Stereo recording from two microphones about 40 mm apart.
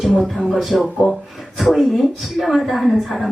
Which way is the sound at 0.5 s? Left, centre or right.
Centre.